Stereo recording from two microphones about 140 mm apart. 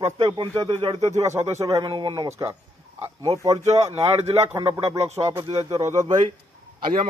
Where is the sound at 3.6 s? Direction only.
50° right (ahead or behind).